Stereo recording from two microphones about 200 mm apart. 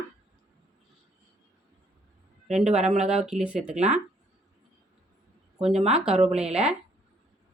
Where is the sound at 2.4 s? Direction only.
Centre (ahead or behind).